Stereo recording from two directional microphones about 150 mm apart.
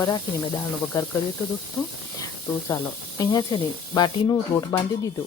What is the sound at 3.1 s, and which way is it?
Speech, 25° left (ahead or behind).